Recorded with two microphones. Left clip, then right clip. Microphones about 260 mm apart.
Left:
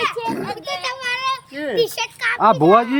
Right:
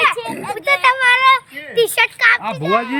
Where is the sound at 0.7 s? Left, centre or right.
Centre.